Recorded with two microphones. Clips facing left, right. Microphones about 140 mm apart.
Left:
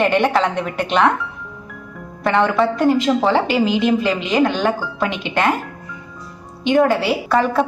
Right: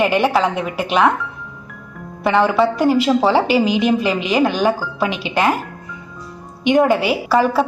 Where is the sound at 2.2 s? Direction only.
5° right (ahead or behind).